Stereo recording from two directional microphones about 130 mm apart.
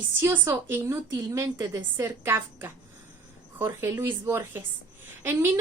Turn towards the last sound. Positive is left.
turn(degrees=-15)  # may be behind; listen again after turning